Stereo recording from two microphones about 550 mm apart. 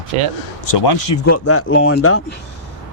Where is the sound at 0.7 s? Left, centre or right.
Left.